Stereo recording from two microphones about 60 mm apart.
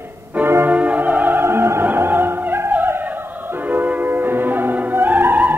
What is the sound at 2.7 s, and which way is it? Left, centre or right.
Music, right.